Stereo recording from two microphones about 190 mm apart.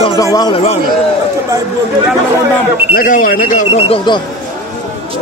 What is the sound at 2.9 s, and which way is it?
Speech, 45° left (ahead or behind).